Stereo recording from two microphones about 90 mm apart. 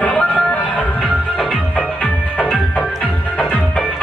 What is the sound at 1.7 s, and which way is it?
Music, 15° left (ahead or behind).